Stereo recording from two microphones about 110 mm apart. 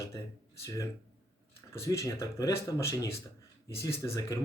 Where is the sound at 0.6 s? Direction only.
30° left (ahead or behind).